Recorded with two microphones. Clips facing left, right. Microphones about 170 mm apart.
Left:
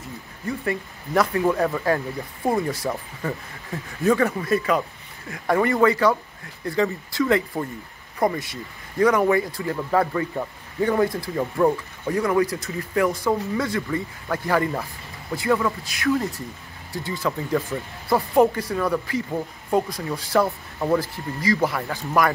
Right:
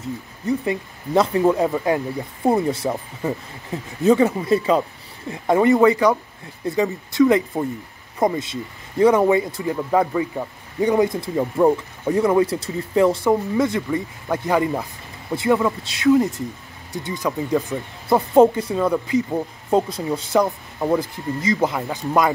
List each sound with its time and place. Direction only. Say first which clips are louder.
0.5 s speech: right 4 dB; 20° right (ahead or behind)